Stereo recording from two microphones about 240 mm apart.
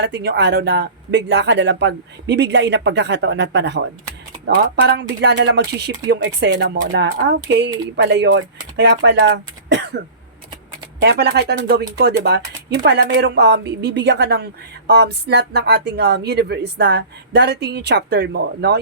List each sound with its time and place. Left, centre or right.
0.0 s speech: right
11.0 s speech: right